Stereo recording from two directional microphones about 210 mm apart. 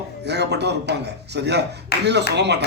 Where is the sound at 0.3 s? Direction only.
55° right (ahead or behind).